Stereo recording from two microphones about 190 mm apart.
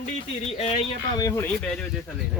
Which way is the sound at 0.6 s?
30° left (ahead or behind).